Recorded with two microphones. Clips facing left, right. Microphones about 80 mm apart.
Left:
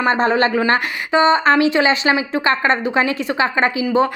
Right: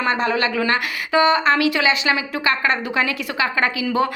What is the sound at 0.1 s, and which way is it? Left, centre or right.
A woman's voice, left.